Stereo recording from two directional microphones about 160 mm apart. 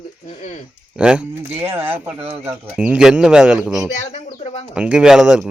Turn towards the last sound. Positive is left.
turn(degrees=-5)  # may be behind; listen again after turning